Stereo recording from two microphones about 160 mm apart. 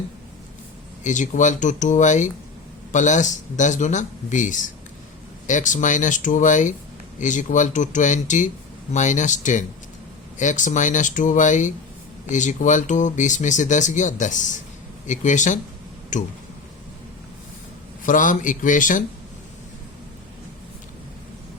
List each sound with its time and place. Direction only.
1.0 s speech: 50° left (ahead or behind)
18.0 s speech: 55° left (ahead or behind)